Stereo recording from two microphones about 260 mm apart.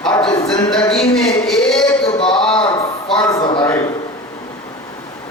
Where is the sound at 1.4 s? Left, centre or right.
Centre.